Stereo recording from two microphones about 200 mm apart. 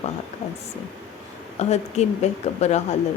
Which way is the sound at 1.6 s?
35° left (ahead or behind).